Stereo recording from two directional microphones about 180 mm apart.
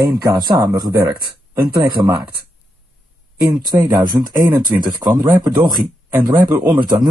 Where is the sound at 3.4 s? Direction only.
20° right (ahead or behind).